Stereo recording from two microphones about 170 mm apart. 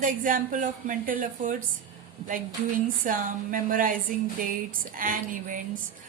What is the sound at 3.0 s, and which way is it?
Speech, 50° right (ahead or behind).